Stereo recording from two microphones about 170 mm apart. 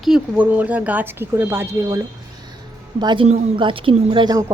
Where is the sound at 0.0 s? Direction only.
5° right (ahead or behind).